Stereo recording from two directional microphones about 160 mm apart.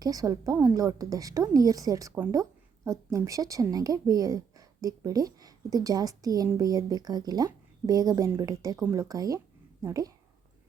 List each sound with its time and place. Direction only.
0.0 s a woman's voice: 20° right (ahead or behind)